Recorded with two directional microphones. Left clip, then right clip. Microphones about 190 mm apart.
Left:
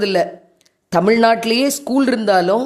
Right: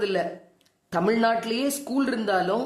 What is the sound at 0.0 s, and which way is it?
Speech, 35° left (ahead or behind).